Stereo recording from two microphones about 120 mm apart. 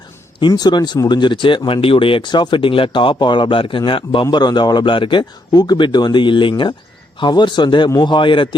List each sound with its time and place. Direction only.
0.3 s speech: 35° left (ahead or behind)